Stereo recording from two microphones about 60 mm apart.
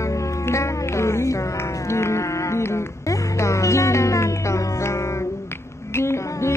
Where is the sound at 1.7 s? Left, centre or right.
Left.